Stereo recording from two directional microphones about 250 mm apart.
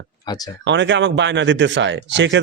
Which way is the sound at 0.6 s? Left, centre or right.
Right.